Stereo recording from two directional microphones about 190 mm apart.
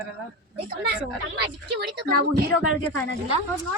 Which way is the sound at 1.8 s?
55° right (ahead or behind).